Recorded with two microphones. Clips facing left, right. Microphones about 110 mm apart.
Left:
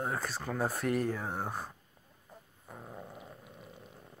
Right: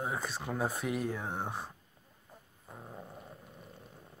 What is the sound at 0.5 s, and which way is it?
Speech, 15° right (ahead or behind).